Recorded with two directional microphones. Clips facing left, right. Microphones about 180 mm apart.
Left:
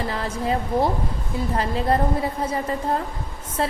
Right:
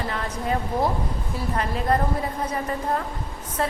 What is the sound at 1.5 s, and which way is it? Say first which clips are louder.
Speech: left 1 dB; 30° left (ahead or behind).